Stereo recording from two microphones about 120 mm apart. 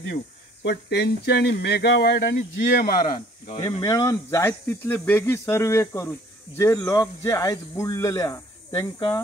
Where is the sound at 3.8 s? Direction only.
25° left (ahead or behind).